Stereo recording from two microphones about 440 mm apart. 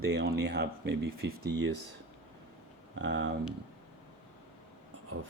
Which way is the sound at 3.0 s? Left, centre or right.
Right.